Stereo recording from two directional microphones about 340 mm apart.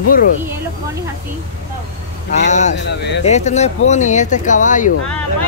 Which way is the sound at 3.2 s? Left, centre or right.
Centre.